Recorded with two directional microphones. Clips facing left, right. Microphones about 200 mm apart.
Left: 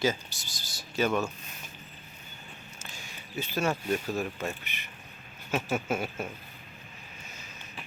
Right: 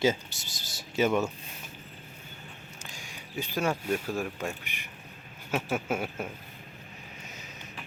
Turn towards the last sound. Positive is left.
turn(degrees=-10)  # may be behind; listen again after turning